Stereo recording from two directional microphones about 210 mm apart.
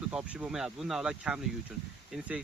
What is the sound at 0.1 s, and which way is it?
Speech, 5° right (ahead or behind).